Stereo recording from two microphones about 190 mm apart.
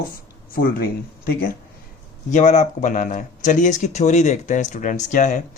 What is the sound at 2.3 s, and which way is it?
Speech, 40° left (ahead or behind).